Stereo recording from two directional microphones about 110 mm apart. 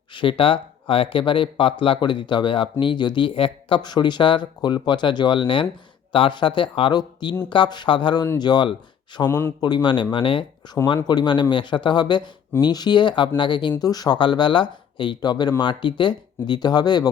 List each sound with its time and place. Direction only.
0.1 s speech: 50° left (ahead or behind)
3.8 s speech: 40° left (ahead or behind)
9.2 s speech: 20° left (ahead or behind)
9.6 s speech: 40° left (ahead or behind)